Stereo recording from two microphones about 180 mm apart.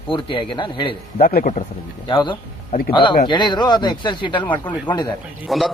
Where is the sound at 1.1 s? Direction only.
50° left (ahead or behind).